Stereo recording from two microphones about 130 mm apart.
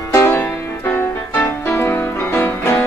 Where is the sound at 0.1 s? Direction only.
15° left (ahead or behind).